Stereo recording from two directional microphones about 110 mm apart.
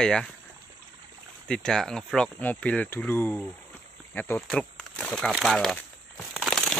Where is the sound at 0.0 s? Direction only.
5° left (ahead or behind).